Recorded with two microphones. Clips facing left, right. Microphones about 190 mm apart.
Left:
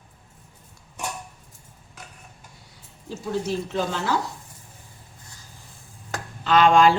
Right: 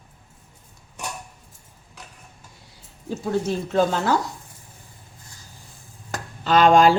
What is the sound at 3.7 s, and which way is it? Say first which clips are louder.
Speech: right 6 dB; 50° right (ahead or behind).